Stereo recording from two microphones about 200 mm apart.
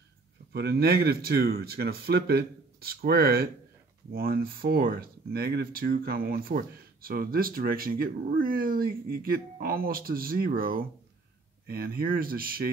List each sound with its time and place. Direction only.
0.5 s speech: 55° right (ahead or behind)